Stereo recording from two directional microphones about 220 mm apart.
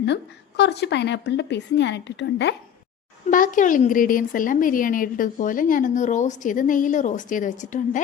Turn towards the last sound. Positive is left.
turn(degrees=35)  # may be behind; listen again after turning